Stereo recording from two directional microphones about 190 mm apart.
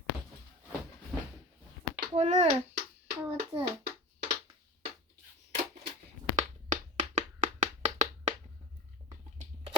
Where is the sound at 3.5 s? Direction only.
30° right (ahead or behind).